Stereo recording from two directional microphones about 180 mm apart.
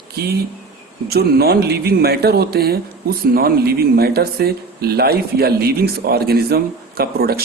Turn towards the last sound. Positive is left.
turn(degrees=-55)  # may be behind; listen again after turning